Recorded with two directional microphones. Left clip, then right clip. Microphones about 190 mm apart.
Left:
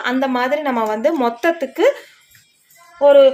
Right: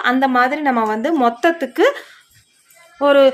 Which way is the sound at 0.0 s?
25° right (ahead or behind).